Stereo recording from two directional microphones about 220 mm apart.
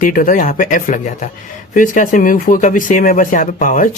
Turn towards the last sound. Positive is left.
turn(degrees=35)  # may be behind; listen again after turning